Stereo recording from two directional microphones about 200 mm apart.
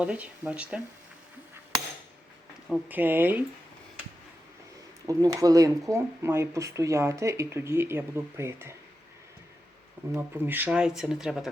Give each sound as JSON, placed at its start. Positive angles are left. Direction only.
{"t": 0.0, "sound": "speech", "side_deg": -5}
{"t": 2.6, "sound": "speech", "side_deg": -10}
{"t": 5.0, "sound": "speech", "side_deg": -15}
{"t": 10.2, "sound": "speech", "side_deg": -10}